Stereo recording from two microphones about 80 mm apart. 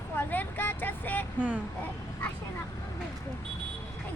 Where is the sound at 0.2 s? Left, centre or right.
Left.